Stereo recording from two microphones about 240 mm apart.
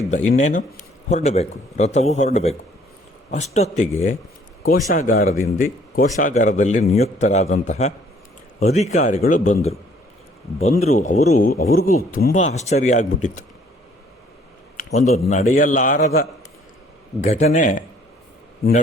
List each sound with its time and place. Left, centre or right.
0.3 s speech: left
14.8 s speech: left